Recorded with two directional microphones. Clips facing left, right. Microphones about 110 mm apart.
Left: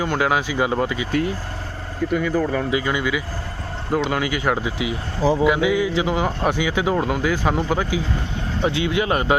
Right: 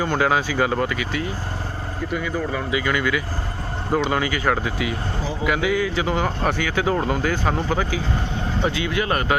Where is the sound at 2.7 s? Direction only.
30° left (ahead or behind).